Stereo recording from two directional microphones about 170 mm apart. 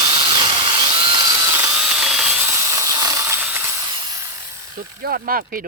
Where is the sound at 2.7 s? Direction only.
20° right (ahead or behind).